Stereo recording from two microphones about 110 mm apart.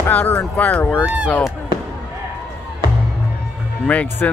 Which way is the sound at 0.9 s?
10° right (ahead or behind).